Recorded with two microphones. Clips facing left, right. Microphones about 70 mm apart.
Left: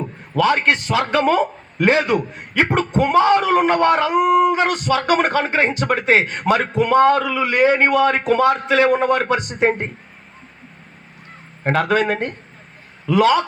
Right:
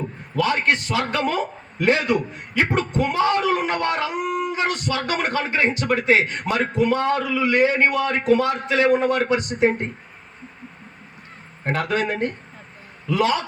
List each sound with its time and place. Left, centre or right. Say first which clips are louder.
0.4 s a man's voice: left 4 dB; left
4.2 s speech: left 10 dB; left
4.5 s a man's voice: left 5 dB; left
11.8 s speech: left 4 dB; left